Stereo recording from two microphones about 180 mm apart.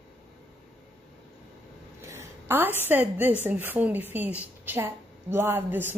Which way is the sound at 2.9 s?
10° right (ahead or behind).